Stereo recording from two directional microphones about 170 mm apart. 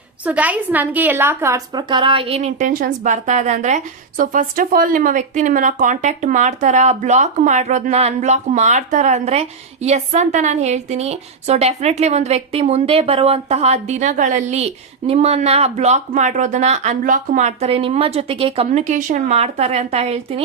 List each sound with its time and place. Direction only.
0.3 s a woman's voice: 10° right (ahead or behind); by 20.4 s 35° right (ahead or behind)